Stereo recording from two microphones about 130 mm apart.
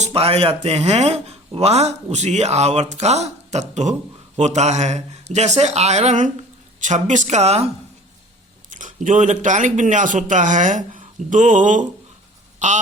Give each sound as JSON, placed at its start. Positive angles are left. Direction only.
{"t": 0.0, "sound": "speech", "side_deg": -50}
{"t": 8.7, "sound": "speech", "side_deg": -80}
{"t": 12.5, "sound": "a sound", "side_deg": -70}